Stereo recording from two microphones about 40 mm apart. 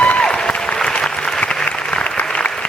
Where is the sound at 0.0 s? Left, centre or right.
Left.